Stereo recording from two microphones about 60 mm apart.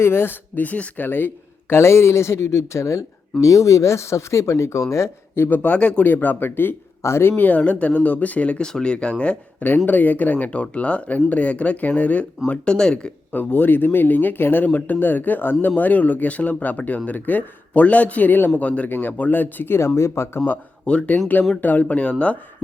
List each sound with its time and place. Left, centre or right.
0.0 s speech: left
1.7 s speech: left
5.5 s speech: left
7.0 s a man's voice: left; by 9.6 s centre
9.6 s a man's voice: left
12.5 s speech: centre
13.3 s a man's voice: left
20.0 s speech: left
20.8 s a man's voice: centre